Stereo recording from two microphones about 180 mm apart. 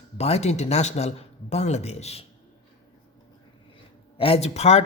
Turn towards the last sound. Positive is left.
turn(degrees=35)  # may be behind; listen again after turning